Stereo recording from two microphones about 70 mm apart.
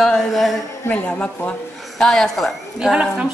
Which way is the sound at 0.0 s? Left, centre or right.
Centre.